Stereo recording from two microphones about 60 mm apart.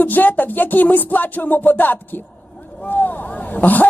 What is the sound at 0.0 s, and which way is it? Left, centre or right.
Music, left.